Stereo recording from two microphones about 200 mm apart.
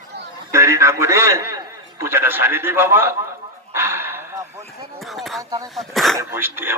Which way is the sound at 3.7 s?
10° right (ahead or behind).